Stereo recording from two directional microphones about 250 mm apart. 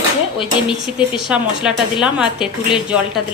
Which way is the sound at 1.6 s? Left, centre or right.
Centre.